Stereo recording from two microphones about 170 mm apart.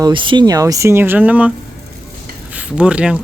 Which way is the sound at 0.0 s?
30° right (ahead or behind).